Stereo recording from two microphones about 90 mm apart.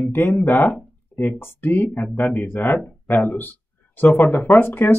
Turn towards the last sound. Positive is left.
turn(degrees=20)  # may be behind; listen again after turning